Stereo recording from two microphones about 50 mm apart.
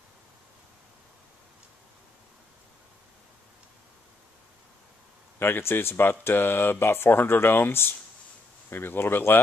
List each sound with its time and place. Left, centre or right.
5.4 s speech: left